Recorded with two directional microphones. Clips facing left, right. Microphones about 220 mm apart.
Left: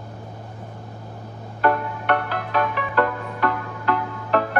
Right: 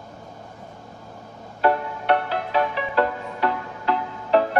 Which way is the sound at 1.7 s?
25° right (ahead or behind).